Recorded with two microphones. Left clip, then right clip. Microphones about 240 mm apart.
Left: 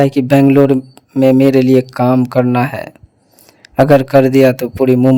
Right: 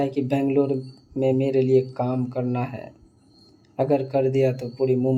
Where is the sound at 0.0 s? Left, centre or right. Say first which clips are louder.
Left 13 dB; left.